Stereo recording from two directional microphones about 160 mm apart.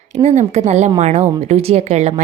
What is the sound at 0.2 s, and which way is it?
A woman's voice, 45° right (ahead or behind).